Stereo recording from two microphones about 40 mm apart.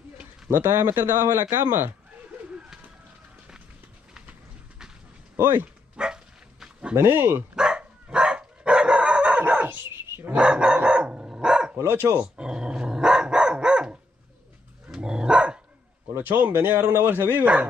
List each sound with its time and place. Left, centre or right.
0.5 s a man's voice: right
5.3 s speech: right
5.9 s dog: right
7.0 s speech: right
7.5 s dog: right
9.4 s dog: right
9.9 s dog: right
10.3 s dog: right
11.4 s bow-wow: centre
11.7 s speech: right
12.4 s dog: right
15.0 s dog: right
16.2 s speech: right
16.5 s speech: right